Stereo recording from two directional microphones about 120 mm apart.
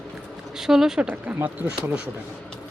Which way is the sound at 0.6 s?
5° right (ahead or behind).